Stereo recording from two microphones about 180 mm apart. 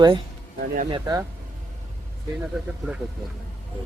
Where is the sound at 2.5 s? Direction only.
Centre (ahead or behind).